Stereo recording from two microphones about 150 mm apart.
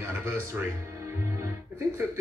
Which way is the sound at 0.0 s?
15° right (ahead or behind).